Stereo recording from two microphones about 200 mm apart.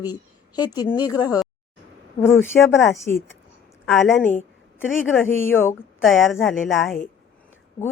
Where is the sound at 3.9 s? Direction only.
5° left (ahead or behind).